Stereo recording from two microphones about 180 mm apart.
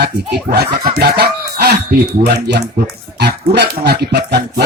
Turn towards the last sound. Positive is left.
turn(degrees=-65)  # may be behind; listen again after turning